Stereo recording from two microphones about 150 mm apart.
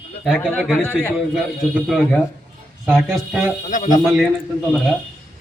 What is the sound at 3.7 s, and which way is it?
Speech, 55° left (ahead or behind).